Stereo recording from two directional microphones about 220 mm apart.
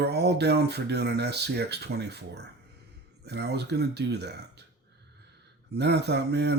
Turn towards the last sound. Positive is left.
turn(degrees=-50)  # may be behind; listen again after turning